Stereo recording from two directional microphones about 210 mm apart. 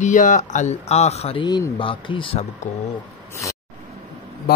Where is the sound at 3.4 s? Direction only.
15° left (ahead or behind).